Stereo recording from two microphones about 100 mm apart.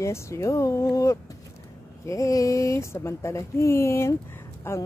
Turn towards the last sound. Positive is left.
turn(degrees=25)  # may be behind; listen again after turning